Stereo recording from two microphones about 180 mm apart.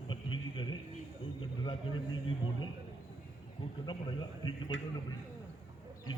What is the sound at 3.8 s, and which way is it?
Speech, 25° left (ahead or behind).